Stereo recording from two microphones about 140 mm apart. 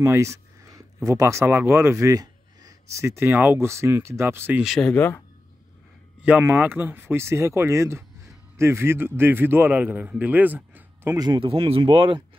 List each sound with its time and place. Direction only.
0.0 s a sound: 20° right (ahead or behind)
1.0 s speech: 20° right (ahead or behind)
4.6 s speech: centre (ahead or behind)
4.9 s speech: 15° left (ahead or behind)
6.2 s a man's voice: 10° right (ahead or behind)
11.1 s speech: 30° right (ahead or behind)